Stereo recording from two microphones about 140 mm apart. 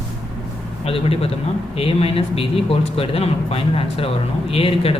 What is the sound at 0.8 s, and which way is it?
Speech, 45° left (ahead or behind).